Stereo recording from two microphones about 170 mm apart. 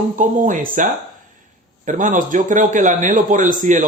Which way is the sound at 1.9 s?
50° right (ahead or behind).